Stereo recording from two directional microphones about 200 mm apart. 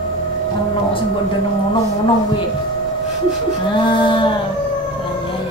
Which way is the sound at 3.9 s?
25° left (ahead or behind).